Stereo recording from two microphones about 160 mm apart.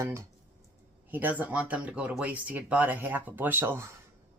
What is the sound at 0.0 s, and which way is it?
Speech, 15° right (ahead or behind).